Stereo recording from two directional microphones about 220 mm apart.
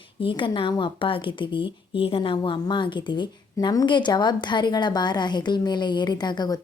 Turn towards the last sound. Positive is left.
turn(degrees=20)  # may be behind; listen again after turning